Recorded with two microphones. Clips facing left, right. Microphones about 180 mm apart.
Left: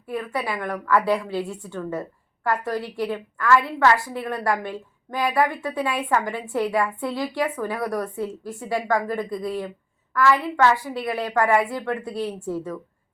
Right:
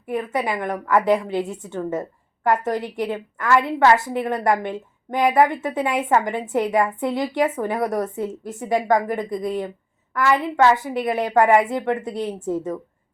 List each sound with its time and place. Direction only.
0.1 s a woman's voice: 20° right (ahead or behind)